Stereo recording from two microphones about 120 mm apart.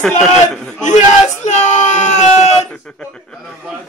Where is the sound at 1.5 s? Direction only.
80° left.